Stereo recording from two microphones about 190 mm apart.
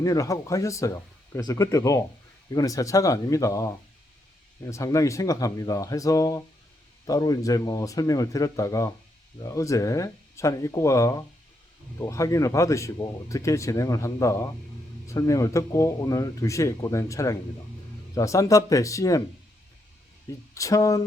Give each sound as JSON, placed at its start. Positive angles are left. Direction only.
{"t": 0.0, "sound": "speech", "side_deg": 15}
{"t": 20.5, "sound": "speech", "side_deg": 15}